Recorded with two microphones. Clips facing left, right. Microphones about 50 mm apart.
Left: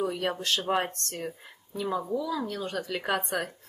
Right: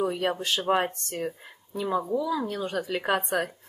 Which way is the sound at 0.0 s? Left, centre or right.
Centre.